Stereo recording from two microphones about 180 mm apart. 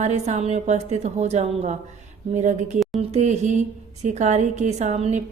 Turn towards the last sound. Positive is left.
turn(degrees=-40)  # may be behind; listen again after turning